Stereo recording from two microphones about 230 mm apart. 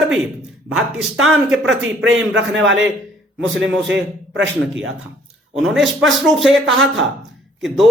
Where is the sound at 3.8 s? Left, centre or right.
Right.